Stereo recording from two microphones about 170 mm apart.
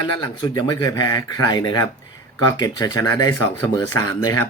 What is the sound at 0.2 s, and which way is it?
Speech, 25° left (ahead or behind).